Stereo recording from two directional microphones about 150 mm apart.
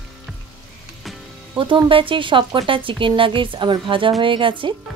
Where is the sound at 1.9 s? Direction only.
35° right (ahead or behind).